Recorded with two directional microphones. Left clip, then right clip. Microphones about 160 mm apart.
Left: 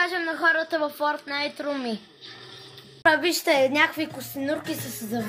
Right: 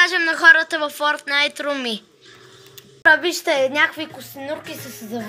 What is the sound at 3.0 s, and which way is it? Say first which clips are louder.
A woman's voice: right 5 dB; centre (ahead or behind).